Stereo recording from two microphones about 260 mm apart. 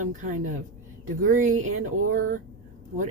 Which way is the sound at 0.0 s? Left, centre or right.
Right.